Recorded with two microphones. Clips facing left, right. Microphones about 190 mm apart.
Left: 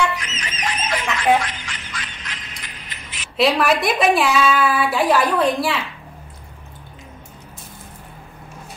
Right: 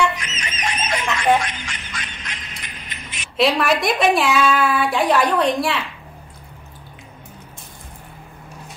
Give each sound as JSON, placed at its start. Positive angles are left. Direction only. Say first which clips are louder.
{"t": 0.2, "sound": "music", "louder": "even", "side_deg": -20}
{"t": 3.3, "sound": "a woman's voice", "louder": "left 1 dB", "side_deg": 0}